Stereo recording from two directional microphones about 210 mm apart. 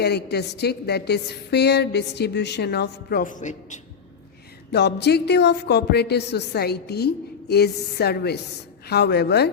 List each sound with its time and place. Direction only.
0.0 s a woman's voice: 50° left (ahead or behind)
4.7 s a woman's voice: 55° left (ahead or behind)